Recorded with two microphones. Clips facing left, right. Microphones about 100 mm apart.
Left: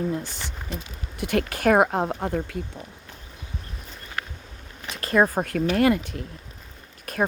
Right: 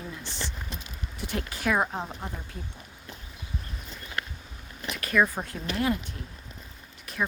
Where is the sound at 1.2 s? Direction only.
65° left (ahead or behind).